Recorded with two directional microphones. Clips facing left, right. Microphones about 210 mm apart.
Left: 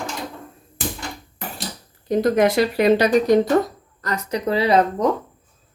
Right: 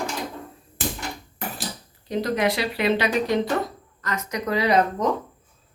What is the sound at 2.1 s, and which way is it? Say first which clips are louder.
A woman's voice: left 6 dB; 50° left (ahead or behind).